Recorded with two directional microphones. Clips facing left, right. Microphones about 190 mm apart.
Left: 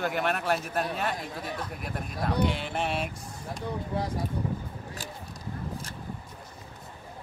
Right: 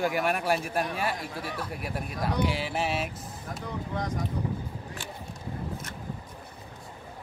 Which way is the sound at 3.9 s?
35° left (ahead or behind).